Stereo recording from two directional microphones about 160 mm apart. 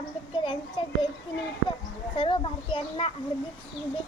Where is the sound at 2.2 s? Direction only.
35° left (ahead or behind).